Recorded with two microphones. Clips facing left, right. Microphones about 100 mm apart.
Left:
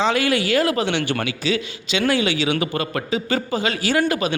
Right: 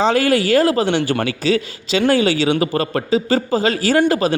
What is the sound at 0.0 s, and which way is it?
A man's voice, 40° right (ahead or behind).